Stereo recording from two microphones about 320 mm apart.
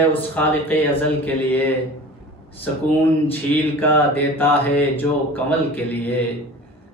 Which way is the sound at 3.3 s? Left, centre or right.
Centre.